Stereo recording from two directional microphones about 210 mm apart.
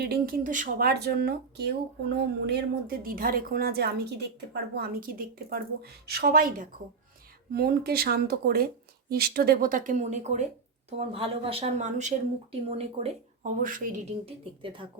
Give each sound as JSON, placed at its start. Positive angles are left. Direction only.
{"t": 0.0, "sound": "speech", "side_deg": -45}
{"t": 13.6, "sound": "speech", "side_deg": -40}
{"t": 14.3, "sound": "speech", "side_deg": -25}